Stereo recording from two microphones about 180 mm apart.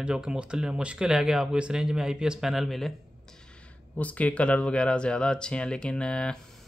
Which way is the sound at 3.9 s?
10° left (ahead or behind).